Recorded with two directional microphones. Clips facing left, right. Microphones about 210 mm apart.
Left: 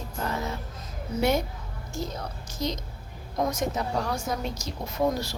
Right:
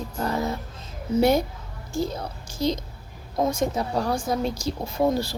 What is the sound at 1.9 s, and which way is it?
Speech, 30° right (ahead or behind).